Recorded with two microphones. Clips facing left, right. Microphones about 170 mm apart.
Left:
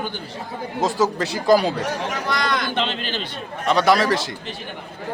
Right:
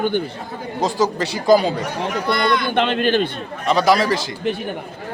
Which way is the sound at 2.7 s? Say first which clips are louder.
Right 8 dB; 55° right (ahead or behind).